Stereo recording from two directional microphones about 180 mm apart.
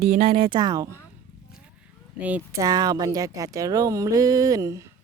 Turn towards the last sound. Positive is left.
turn(degrees=-15)  # may be behind; listen again after turning